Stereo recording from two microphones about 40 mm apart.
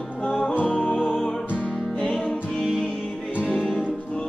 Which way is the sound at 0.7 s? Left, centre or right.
Left.